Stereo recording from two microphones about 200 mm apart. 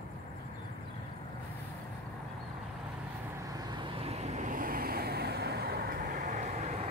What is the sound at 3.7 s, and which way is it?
Vehicle, 25° right (ahead or behind).